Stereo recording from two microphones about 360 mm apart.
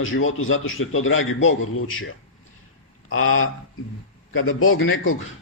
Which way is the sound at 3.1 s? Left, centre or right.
Left.